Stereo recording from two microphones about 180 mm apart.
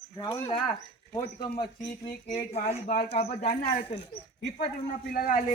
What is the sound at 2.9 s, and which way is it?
Speech, 55° left (ahead or behind).